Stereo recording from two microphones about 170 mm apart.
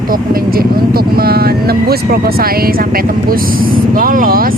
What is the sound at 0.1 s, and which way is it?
Speech, 60° right (ahead or behind).